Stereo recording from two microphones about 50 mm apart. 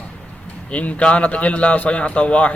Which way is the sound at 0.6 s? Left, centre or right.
Left.